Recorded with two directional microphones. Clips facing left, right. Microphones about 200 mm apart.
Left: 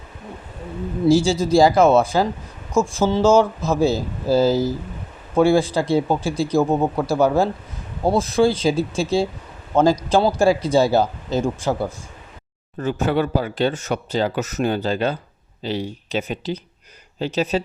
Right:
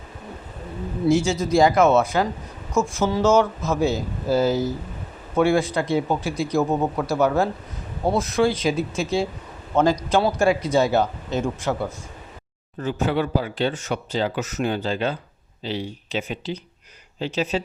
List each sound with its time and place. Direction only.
1.0 s speech: 30° left (ahead or behind)
12.8 s speech: 45° left (ahead or behind)